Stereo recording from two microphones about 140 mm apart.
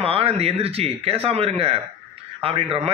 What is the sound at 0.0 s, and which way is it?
A man's voice, 45° right (ahead or behind).